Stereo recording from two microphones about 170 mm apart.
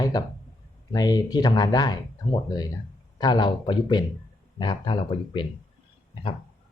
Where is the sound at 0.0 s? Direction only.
20° left (ahead or behind).